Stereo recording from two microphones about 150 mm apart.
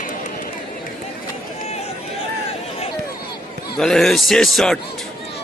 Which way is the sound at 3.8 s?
Centre (ahead or behind).